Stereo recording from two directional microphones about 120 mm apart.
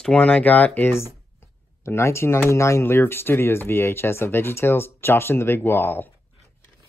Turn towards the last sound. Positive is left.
turn(degrees=15)  # may be behind; listen again after turning